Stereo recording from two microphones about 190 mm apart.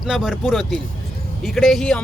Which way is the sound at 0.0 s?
5° right (ahead or behind).